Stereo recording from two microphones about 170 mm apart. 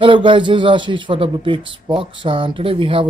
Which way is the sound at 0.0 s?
30° right (ahead or behind).